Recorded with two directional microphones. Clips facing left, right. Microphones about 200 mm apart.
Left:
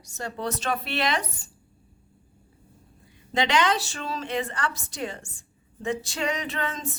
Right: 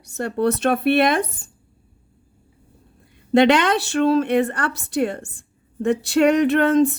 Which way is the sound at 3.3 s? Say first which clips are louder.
Right 9 dB; 60° right (ahead or behind).